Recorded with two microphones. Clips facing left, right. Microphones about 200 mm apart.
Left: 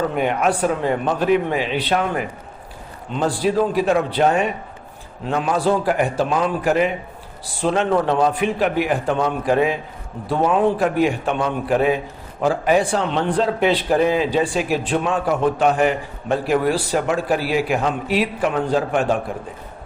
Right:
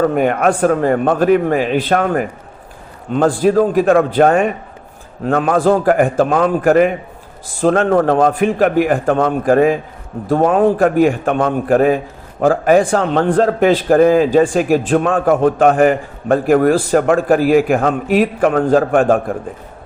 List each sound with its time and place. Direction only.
0.0 s a man's voice: 50° right (ahead or behind)